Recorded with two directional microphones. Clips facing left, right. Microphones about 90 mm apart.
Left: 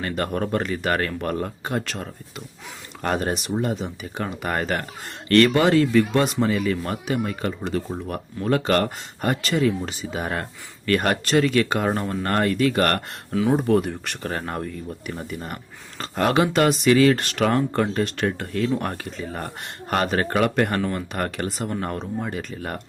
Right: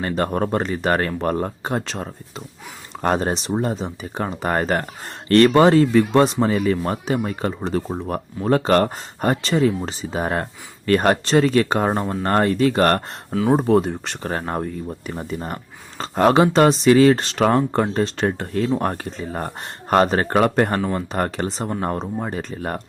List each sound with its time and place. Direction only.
0.0 s speech: 30° right (ahead or behind)